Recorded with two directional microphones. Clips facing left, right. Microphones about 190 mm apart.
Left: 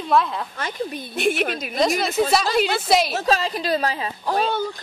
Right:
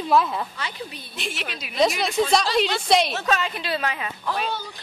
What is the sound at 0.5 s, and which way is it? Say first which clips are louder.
A woman's voice: left 6 dB; 50° left (ahead or behind).